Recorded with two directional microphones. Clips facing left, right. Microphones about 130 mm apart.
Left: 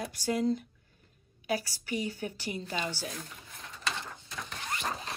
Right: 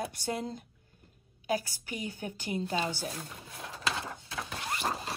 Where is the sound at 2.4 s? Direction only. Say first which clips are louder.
Right 5 dB; 40° right (ahead or behind).